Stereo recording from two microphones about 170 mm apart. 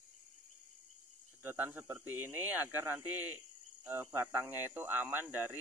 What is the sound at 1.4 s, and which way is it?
Speech, 10° right (ahead or behind).